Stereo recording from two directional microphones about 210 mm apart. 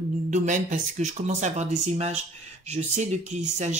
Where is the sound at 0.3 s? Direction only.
35° right (ahead or behind).